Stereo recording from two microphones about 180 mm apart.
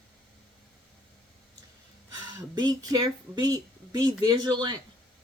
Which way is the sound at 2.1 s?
20° right (ahead or behind).